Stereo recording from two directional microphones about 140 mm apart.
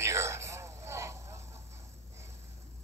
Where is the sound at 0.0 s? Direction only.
20° right (ahead or behind).